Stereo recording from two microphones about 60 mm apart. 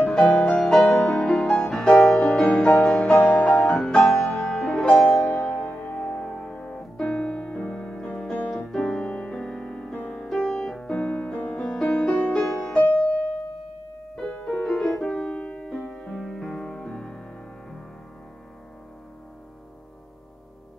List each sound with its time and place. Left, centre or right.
0.0 s music: centre; by 5.9 s left
6.2 s music: centre
14.1 s music: centre
15.1 s music: left
15.6 s music: centre